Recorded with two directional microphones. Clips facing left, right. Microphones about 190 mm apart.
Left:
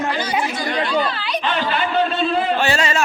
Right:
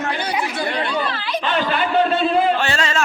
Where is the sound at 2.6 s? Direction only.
10° left (ahead or behind).